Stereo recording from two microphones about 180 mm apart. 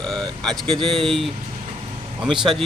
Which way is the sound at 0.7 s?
30° right (ahead or behind).